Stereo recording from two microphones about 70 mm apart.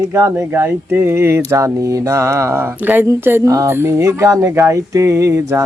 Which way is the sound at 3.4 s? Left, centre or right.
Right.